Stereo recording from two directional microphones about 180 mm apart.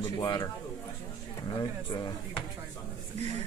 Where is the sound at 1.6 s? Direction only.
25° left (ahead or behind).